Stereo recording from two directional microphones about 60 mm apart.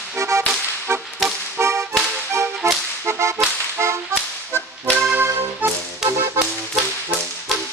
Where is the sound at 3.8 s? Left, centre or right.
Right.